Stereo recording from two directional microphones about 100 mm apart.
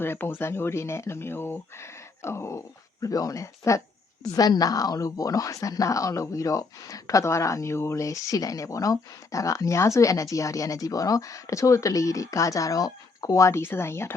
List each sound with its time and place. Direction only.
0.0 s speech: 20° left (ahead or behind)